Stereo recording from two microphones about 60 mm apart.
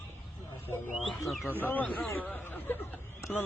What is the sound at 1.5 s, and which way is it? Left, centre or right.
A man's voice, left.